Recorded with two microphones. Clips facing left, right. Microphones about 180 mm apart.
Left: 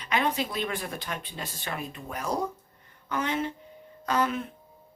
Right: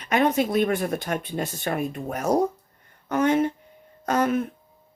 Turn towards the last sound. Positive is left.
turn(degrees=-45)  # may be behind; listen again after turning